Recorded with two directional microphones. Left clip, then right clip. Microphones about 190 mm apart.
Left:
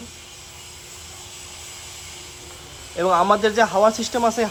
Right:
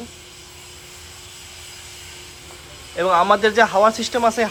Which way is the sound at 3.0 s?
15° left (ahead or behind).